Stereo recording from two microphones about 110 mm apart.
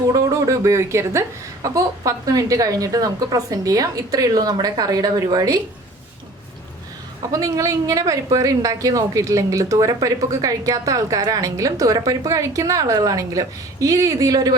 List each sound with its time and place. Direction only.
0.1 s a woman's voice: 30° right (ahead or behind)
7.3 s a woman's voice: 30° right (ahead or behind)